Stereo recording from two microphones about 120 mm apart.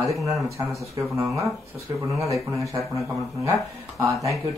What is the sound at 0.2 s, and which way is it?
Speech, centre (ahead or behind).